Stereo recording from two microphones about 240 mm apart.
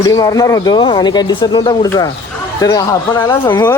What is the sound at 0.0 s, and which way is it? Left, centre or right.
Speech, centre.